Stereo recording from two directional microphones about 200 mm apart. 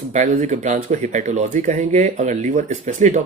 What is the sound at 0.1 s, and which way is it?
Speech, 40° right (ahead or behind).